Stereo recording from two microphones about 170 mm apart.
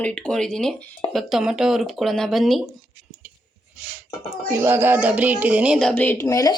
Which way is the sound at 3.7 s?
10° right (ahead or behind).